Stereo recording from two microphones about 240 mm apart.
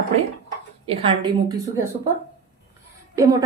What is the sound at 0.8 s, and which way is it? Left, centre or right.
Speech, right.